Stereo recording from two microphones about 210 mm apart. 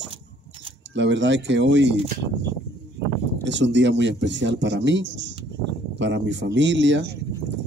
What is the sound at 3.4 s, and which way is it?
Speech, 55° right (ahead or behind).